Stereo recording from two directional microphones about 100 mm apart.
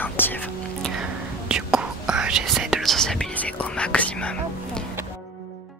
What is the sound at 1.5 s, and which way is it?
Whispering, 10° right (ahead or behind).